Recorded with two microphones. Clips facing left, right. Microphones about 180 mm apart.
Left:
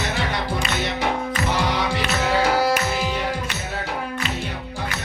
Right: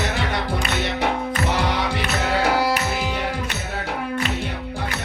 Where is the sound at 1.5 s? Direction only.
60° right (ahead or behind).